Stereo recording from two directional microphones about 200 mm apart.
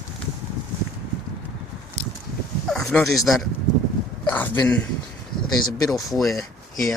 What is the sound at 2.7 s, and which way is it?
Bow-wow, centre (ahead or behind).